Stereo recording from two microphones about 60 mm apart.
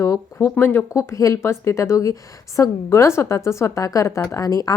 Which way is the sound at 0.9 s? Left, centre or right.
Left.